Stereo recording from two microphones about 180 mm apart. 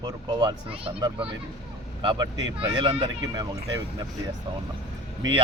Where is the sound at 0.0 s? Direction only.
25° right (ahead or behind).